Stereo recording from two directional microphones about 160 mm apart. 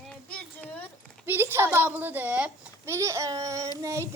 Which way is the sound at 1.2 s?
15° right (ahead or behind).